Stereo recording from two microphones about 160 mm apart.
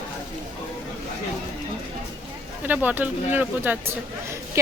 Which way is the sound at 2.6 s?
10° right (ahead or behind).